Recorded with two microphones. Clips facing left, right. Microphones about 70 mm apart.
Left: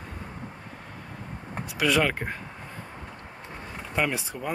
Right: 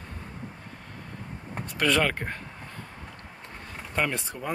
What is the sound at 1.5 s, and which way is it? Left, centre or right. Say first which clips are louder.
Speech: left 1 dB; centre.